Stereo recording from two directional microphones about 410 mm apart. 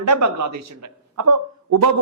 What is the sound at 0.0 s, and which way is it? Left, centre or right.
A man's voice, right.